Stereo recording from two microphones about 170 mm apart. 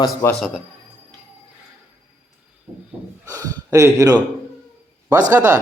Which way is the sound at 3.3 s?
20° right (ahead or behind).